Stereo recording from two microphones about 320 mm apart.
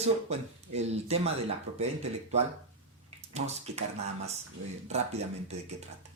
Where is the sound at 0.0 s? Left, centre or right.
Centre.